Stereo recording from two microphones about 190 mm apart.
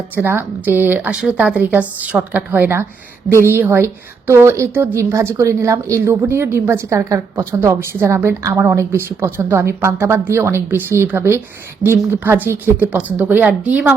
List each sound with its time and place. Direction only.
0.2 s a woman's voice: 10° right (ahead or behind)